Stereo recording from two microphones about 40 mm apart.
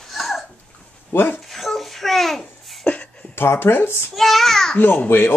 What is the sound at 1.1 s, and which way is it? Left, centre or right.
Speech, left.